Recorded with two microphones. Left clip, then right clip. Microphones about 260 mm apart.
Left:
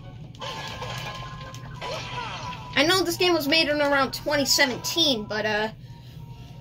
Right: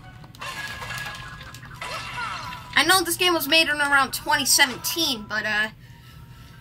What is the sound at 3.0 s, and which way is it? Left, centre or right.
Speech, centre.